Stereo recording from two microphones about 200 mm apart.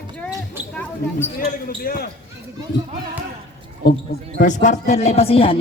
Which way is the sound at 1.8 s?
50° left (ahead or behind).